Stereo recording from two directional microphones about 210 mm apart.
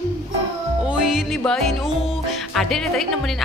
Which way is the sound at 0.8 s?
Centre (ahead or behind).